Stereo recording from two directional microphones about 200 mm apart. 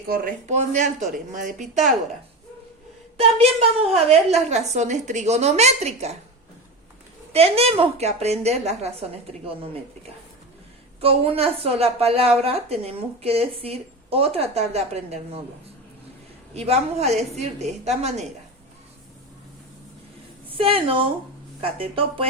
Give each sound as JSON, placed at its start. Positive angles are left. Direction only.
{"t": 0.1, "sound": "a woman's voice", "side_deg": -40}
{"t": 3.2, "sound": "a woman's voice", "side_deg": -30}
{"t": 7.3, "sound": "a woman's voice", "side_deg": -30}
{"t": 11.0, "sound": "a woman's voice", "side_deg": -30}
{"t": 16.6, "sound": "a woman's voice", "side_deg": -35}
{"t": 20.6, "sound": "a woman's voice", "side_deg": -25}